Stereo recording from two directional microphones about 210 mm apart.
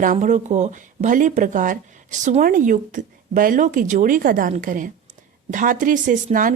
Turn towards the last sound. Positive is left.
turn(degrees=-40)  # may be behind; listen again after turning